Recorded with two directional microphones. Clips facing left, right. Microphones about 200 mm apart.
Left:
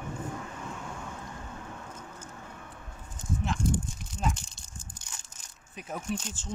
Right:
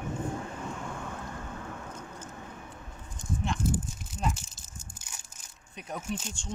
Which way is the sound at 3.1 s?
Centre (ahead or behind).